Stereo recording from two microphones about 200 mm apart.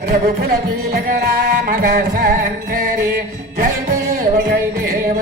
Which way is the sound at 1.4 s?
50° right (ahead or behind).